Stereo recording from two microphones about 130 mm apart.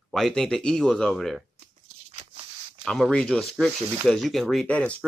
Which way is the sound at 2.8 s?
5° left (ahead or behind).